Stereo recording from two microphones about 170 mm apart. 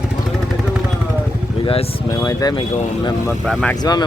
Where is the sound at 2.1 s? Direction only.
20° left (ahead or behind).